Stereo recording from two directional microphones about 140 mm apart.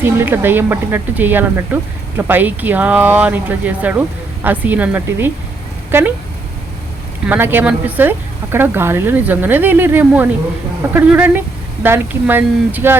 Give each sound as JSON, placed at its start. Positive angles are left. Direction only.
{"t": 0.0, "sound": "speech", "side_deg": -15}
{"t": 7.3, "sound": "speech", "side_deg": -15}